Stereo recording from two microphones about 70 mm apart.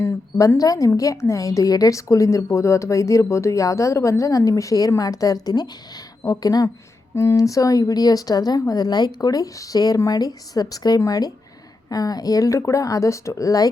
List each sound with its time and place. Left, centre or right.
0.3 s a woman's voice: left
6.2 s speech: left
7.2 s a woman's voice: left